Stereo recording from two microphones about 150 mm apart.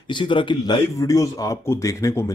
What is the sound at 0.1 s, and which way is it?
Speech, 35° left (ahead or behind).